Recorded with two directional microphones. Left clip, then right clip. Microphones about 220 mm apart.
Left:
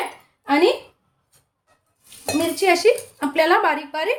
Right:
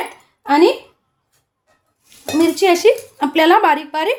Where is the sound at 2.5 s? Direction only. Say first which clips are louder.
Right 3 dB; 35° right (ahead or behind).